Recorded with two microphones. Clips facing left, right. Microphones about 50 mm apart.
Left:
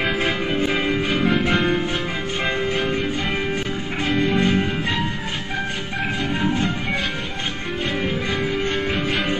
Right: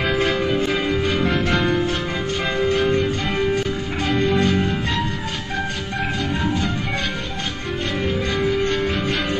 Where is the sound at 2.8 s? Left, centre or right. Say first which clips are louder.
Right 3 dB; centre.